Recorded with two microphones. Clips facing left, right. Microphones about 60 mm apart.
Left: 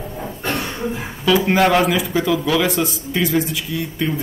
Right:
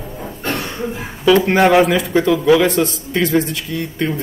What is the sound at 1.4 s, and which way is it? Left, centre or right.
Speech, centre.